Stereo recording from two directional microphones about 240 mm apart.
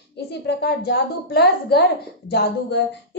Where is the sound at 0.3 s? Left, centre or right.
Left.